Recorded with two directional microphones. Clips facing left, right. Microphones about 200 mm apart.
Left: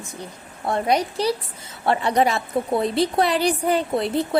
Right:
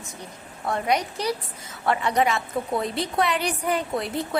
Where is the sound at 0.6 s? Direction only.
30° left (ahead or behind).